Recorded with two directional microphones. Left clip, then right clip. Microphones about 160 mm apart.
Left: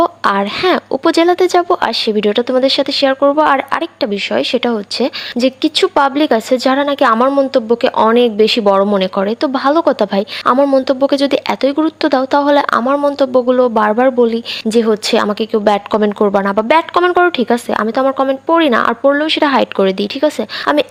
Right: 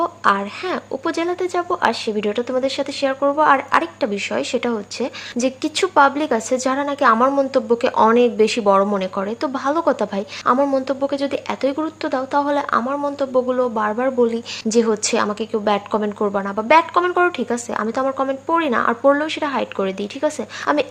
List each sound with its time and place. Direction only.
0.0 s speech: 40° left (ahead or behind)
19.4 s speech: 40° left (ahead or behind)